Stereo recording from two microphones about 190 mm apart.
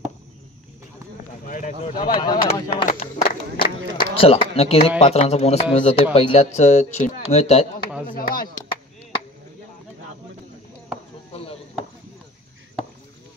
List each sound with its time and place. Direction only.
1.5 s speech: 45° left (ahead or behind)
2.1 s speech: 25° left (ahead or behind)
2.9 s a sound: 40° left (ahead or behind)
4.0 s speech: 30° left (ahead or behind)
8.1 s speech: 50° left (ahead or behind)